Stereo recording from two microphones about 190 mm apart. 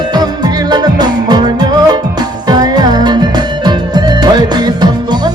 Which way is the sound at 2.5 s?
20° right (ahead or behind).